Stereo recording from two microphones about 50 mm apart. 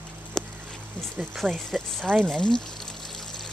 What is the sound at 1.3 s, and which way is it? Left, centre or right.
Speech, centre.